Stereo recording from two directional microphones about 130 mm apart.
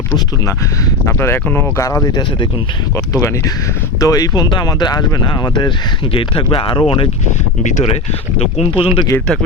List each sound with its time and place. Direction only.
1.0 s speech: 20° left (ahead or behind); by 7.1 s 45° left (ahead or behind)
8.4 s speech: 55° left (ahead or behind)